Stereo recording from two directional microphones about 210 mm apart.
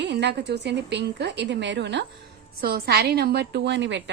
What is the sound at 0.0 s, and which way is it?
A woman's voice, 55° right (ahead or behind).